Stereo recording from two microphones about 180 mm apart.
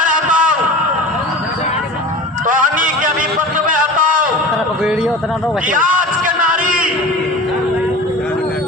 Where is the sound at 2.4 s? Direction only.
45° right (ahead or behind).